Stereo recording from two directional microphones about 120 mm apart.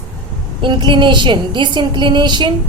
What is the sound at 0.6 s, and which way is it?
A woman's voice, 40° right (ahead or behind).